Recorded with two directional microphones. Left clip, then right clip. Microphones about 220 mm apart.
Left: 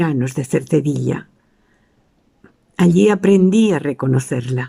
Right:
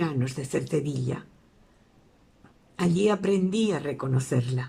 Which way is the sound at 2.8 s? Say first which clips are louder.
Left 10 dB; 45° left (ahead or behind).